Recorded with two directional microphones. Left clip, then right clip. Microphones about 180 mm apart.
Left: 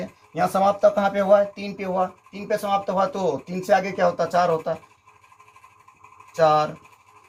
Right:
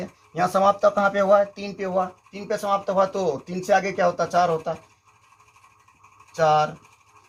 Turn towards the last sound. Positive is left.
turn(degrees=-25)  # may be behind; listen again after turning